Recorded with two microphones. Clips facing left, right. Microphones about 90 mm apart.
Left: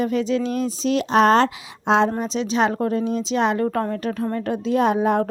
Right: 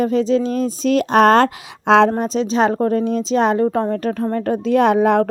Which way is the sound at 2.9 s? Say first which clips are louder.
Right 4 dB; 45° right (ahead or behind).